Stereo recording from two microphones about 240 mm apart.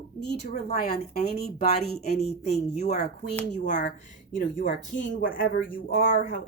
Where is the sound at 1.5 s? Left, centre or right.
Left.